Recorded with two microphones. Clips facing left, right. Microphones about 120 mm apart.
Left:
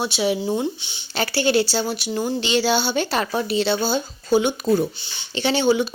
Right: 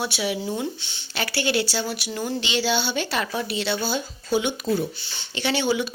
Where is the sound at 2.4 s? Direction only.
40° left (ahead or behind).